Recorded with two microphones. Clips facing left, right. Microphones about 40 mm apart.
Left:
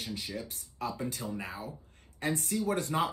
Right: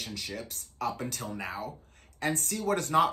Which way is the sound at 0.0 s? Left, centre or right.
Right.